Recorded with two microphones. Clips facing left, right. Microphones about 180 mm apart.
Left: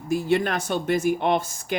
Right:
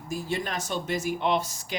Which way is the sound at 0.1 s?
65° left (ahead or behind).